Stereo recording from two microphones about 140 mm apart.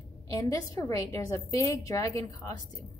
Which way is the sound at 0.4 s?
25° left (ahead or behind).